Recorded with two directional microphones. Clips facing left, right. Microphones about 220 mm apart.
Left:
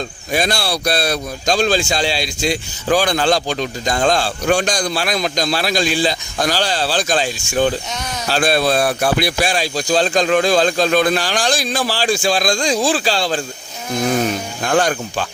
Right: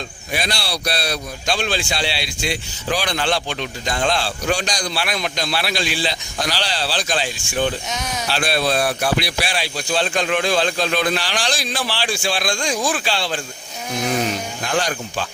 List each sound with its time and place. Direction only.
0.3 s speech: 45° left (ahead or behind)
7.9 s speech: centre (ahead or behind)
8.3 s speech: 45° left (ahead or behind)
14.7 s speech: 50° left (ahead or behind)